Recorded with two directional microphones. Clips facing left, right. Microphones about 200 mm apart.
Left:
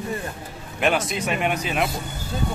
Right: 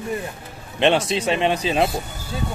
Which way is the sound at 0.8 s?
25° right (ahead or behind).